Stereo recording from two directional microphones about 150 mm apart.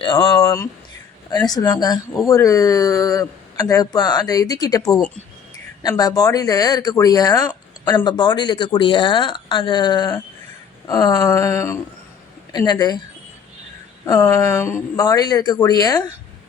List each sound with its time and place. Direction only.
0.0 s speech: 35° left (ahead or behind)
0.3 s a man's voice: 20° left (ahead or behind)
4.9 s speech: 5° left (ahead or behind)
5.9 s a man's voice: 25° left (ahead or behind)
14.0 s a man's voice: 20° left (ahead or behind)